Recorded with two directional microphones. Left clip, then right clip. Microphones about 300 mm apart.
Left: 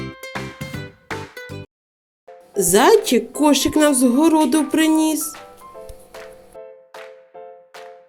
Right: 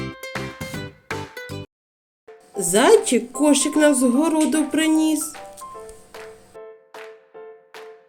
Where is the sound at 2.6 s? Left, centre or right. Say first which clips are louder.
Left 2 dB; left.